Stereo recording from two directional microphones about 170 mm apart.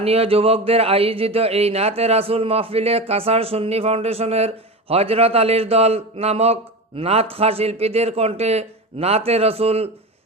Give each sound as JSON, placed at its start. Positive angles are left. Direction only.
{"t": 0.0, "sound": "speech", "side_deg": -35}